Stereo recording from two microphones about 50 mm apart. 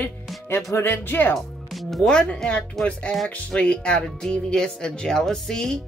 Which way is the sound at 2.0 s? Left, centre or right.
Centre.